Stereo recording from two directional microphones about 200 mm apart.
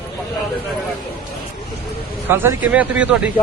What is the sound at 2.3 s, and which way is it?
Speech, 10° right (ahead or behind).